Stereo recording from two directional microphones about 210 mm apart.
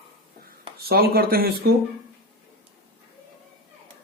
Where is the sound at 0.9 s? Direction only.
45° right (ahead or behind).